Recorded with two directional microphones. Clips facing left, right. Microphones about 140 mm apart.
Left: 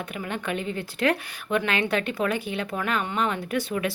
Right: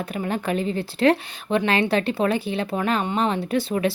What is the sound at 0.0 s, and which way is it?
Speech, 35° right (ahead or behind).